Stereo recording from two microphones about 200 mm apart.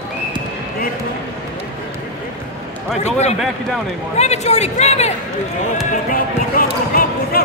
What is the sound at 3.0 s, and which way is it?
A man's voice, 35° left (ahead or behind).